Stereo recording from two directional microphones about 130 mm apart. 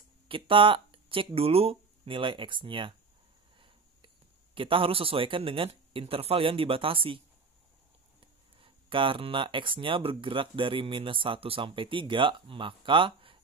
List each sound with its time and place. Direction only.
0.3 s speech: 40° right (ahead or behind)
3.5 s a sound: 40° right (ahead or behind)
4.6 s speech: 40° right (ahead or behind)
8.2 s speech: 40° right (ahead or behind)